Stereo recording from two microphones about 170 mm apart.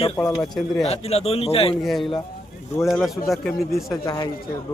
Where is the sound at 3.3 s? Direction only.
Centre (ahead or behind).